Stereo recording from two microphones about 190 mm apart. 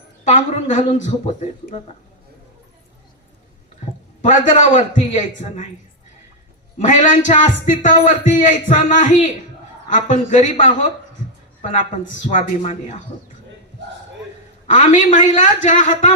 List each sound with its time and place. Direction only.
0.3 s speech: 40° left (ahead or behind)
4.2 s speech: 40° left (ahead or behind)
6.7 s speech: 40° left (ahead or behind)
12.3 s speech: 40° left (ahead or behind)
14.7 s speech: 40° left (ahead or behind)